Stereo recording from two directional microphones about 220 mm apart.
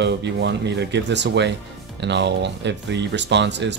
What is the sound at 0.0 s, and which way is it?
Speech, 50° right (ahead or behind).